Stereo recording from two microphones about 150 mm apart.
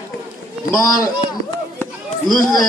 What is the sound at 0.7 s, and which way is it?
Speech, 25° left (ahead or behind).